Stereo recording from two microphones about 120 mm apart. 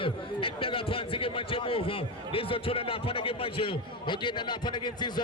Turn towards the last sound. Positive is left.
turn(degrees=40)  # may be behind; listen again after turning